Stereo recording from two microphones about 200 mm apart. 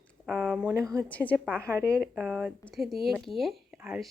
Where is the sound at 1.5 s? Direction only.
10° right (ahead or behind).